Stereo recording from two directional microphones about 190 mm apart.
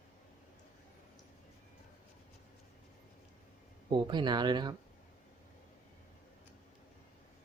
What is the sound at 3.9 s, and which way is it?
Speech, 25° right (ahead or behind).